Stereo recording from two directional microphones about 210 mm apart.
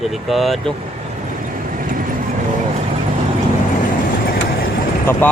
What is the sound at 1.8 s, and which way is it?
Vehicle, 40° right (ahead or behind).